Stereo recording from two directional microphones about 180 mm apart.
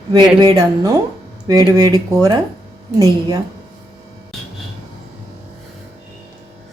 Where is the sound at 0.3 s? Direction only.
20° right (ahead or behind).